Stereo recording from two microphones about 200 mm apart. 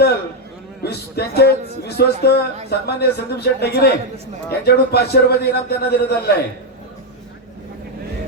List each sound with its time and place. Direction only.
0.8 s a man's voice: 50° left (ahead or behind)